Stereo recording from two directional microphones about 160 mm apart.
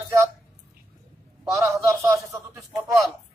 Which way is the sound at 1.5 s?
20° right (ahead or behind).